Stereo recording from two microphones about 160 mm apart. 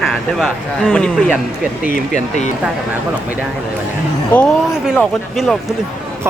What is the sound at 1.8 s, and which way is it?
Speech, 55° left (ahead or behind).